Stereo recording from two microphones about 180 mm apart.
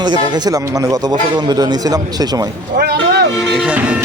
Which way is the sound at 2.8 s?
65° right (ahead or behind).